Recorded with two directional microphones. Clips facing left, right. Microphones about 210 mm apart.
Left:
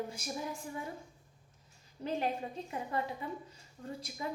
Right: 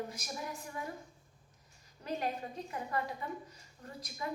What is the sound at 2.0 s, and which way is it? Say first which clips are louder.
Speech: left 2 dB; 25° left (ahead or behind).